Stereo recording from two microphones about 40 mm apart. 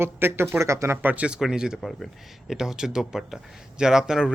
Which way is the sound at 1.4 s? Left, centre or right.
Centre.